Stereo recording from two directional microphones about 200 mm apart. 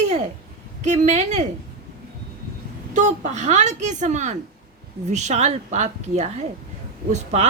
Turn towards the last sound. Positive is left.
turn(degrees=-35)  # may be behind; listen again after turning